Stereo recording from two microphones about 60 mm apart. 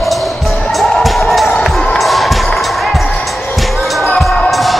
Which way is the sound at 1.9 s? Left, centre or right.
Centre.